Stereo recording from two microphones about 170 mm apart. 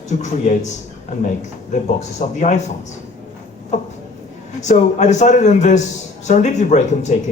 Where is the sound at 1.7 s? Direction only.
45° left (ahead or behind).